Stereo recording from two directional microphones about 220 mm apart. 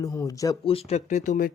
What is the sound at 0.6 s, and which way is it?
Speech, 30° left (ahead or behind).